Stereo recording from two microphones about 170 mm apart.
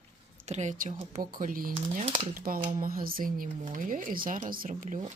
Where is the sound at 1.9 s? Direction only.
35° right (ahead or behind).